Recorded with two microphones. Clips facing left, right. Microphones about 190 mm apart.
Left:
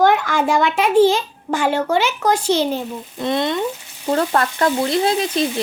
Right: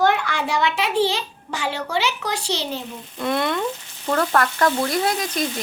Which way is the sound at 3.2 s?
20° left (ahead or behind).